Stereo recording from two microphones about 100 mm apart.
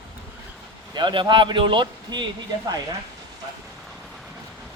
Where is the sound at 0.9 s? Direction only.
50° right (ahead or behind).